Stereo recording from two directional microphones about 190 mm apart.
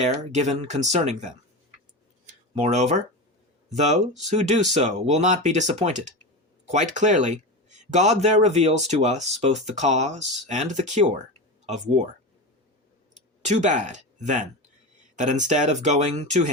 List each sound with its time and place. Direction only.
0.0 s speech: 40° right (ahead or behind)
2.2 s a sound: 35° right (ahead or behind)
3.7 s speech: 40° right (ahead or behind)
13.4 s speech: 40° right (ahead or behind)